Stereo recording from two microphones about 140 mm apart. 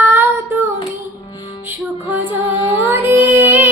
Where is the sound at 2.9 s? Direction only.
15° right (ahead or behind).